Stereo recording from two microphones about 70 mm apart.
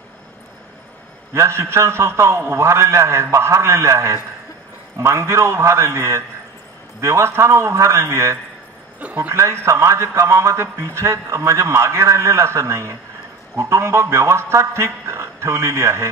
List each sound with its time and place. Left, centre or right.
1.3 s a man's voice: right
9.0 s a man's voice: right
9.3 s a man's voice: right